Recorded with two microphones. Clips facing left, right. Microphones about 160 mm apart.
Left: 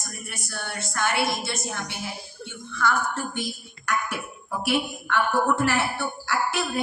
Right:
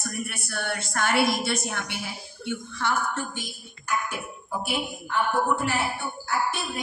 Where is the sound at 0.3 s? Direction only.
60° right (ahead or behind).